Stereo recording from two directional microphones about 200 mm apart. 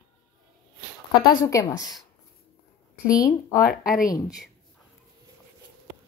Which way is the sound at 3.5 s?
45° left (ahead or behind).